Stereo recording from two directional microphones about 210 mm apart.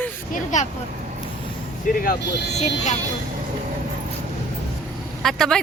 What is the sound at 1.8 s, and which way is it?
Speech, 40° left (ahead or behind).